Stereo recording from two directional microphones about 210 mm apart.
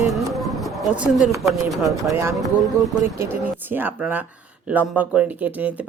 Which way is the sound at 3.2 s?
10° right (ahead or behind).